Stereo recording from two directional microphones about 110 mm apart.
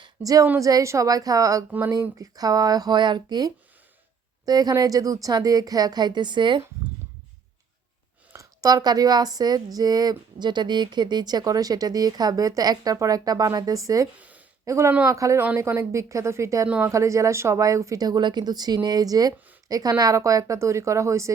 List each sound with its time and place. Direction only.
0.2 s a woman's voice: 35° right (ahead or behind)
8.3 s a woman's voice: 30° right (ahead or behind)
14.2 s a sound: 15° right (ahead or behind)
14.6 s speech: 25° right (ahead or behind)
16.6 s speech: 10° right (ahead or behind)
16.9 s a woman's voice: 30° right (ahead or behind)